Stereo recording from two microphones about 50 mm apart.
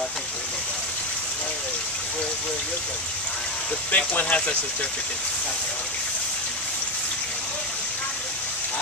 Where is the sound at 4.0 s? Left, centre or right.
Left.